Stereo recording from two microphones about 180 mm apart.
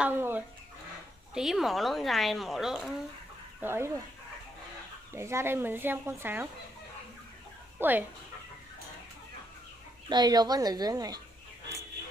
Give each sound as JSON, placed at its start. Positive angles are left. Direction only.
{"t": 0.0, "sound": "speech", "side_deg": -10}
{"t": 3.6, "sound": "speech", "side_deg": -15}
{"t": 5.1, "sound": "speech", "side_deg": -15}
{"t": 7.8, "sound": "speech", "side_deg": -10}
{"t": 10.0, "sound": "speech", "side_deg": -25}